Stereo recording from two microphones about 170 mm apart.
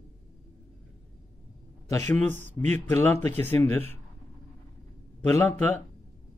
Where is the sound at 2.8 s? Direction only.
15° left (ahead or behind).